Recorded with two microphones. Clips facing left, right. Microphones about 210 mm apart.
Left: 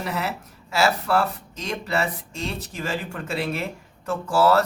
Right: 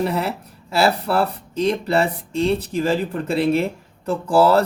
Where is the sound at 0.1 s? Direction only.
30° right (ahead or behind).